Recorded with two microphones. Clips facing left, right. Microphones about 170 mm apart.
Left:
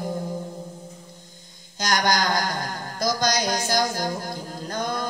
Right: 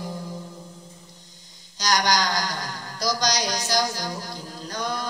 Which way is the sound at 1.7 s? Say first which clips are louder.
Even; 50° left (ahead or behind).